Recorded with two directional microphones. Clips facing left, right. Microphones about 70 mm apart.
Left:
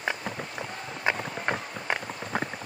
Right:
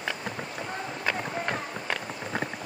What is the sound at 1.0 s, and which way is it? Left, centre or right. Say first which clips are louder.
Run: left 2 dB; left.